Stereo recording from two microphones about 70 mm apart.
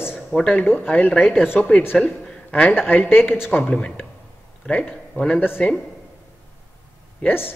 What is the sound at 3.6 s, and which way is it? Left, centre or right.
Speech, centre.